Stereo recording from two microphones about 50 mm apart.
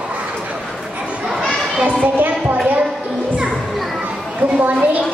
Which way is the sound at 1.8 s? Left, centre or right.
Right.